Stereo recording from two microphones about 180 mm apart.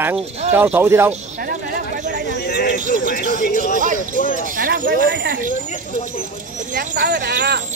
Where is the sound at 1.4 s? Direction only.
55° right (ahead or behind).